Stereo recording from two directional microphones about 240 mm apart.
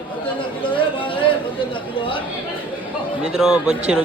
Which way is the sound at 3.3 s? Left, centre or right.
Centre.